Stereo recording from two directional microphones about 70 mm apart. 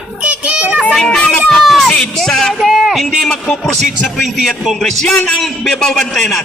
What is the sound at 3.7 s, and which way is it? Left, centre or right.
Speech, centre.